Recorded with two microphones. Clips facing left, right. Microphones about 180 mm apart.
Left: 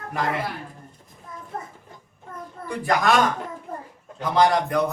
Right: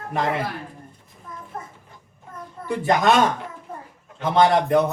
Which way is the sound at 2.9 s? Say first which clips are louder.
Right 2 dB; 25° right (ahead or behind).